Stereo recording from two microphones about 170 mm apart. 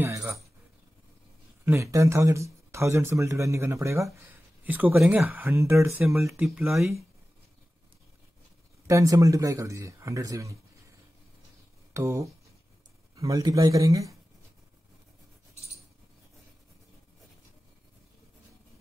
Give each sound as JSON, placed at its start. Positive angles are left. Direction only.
{"t": 0.0, "sound": "speech", "side_deg": -15}
{"t": 1.6, "sound": "speech", "side_deg": -15}
{"t": 6.4, "sound": "speech", "side_deg": 0}
{"t": 6.7, "sound": "speech", "side_deg": -15}
{"t": 8.8, "sound": "speech", "side_deg": -20}